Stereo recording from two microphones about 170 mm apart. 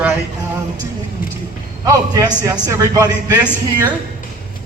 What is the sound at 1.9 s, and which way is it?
Speech, 25° right (ahead or behind).